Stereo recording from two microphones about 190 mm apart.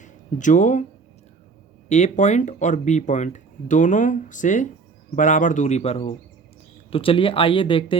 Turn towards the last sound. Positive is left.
turn(degrees=25)  # may be behind; listen again after turning